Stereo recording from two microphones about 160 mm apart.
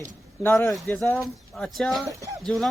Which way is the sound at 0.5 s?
Centre (ahead or behind).